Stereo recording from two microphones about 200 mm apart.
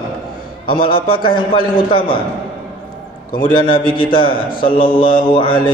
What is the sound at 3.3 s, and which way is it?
A man's voice, 25° left (ahead or behind).